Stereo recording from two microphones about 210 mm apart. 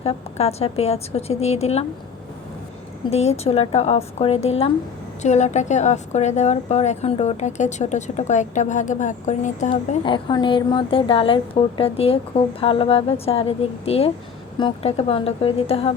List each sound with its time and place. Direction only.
0.0 s a woman's voice: 30° left (ahead or behind)
3.1 s a woman's voice: 30° left (ahead or behind)